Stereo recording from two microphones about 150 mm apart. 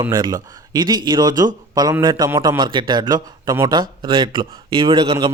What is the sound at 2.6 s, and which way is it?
A man's voice, 30° right (ahead or behind).